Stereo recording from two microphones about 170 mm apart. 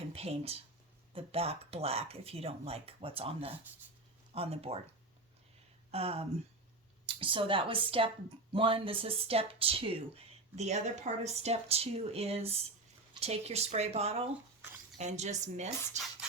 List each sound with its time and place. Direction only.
0.1 s speech: 35° right (ahead or behind)
5.9 s speech: 35° right (ahead or behind)